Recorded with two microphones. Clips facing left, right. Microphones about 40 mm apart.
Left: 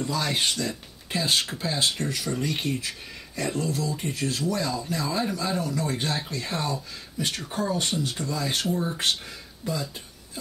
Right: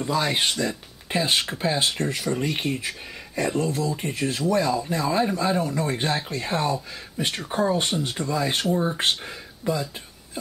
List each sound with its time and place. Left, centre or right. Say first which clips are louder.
0.0 s speech: right 3 dB; right
2.2 s speech: right 2 dB; centre
3.5 s speech: right 3 dB; right